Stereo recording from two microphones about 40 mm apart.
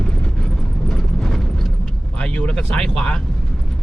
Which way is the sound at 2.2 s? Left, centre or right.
Left.